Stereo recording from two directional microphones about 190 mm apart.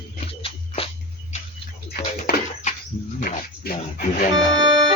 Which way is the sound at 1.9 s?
50° left (ahead or behind).